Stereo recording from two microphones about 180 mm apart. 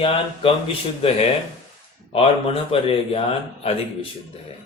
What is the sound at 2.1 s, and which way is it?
Speech, 30° left (ahead or behind).